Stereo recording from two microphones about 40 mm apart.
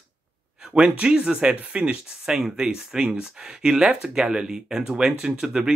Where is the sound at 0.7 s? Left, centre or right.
Right.